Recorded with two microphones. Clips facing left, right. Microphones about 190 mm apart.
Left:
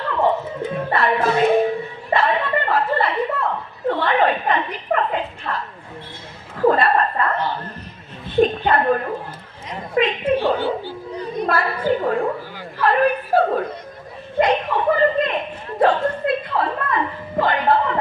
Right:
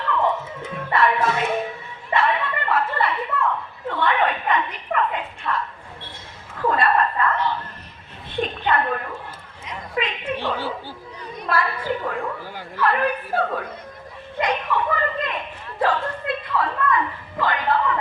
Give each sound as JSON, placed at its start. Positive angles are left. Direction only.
{"t": 0.0, "sound": "speech", "side_deg": 30}
{"t": 2.0, "sound": "chuckle", "side_deg": 35}
{"t": 8.4, "sound": "a woman's voice", "side_deg": 35}
{"t": 9.6, "sound": "a sound", "side_deg": 35}
{"t": 11.4, "sound": "a woman's voice", "side_deg": 35}
{"t": 12.7, "sound": "chuckle", "side_deg": 30}
{"t": 14.3, "sound": "a sound", "side_deg": 30}
{"t": 15.8, "sound": "speech", "side_deg": 30}
{"t": 16.6, "sound": "a sound", "side_deg": 35}